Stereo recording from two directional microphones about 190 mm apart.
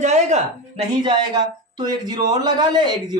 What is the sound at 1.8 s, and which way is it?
Speech, 20° right (ahead or behind).